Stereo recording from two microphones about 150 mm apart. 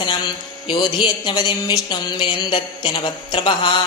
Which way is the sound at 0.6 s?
30° left (ahead or behind).